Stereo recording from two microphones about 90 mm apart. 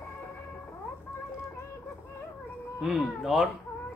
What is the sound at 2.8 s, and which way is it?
Speech, centre (ahead or behind).